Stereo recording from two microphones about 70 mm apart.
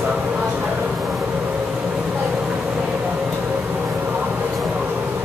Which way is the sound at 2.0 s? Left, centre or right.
Centre.